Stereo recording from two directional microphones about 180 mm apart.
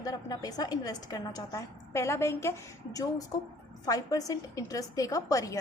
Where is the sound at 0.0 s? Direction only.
20° left (ahead or behind).